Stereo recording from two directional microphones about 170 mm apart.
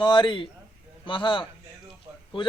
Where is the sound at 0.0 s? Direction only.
30° left (ahead or behind).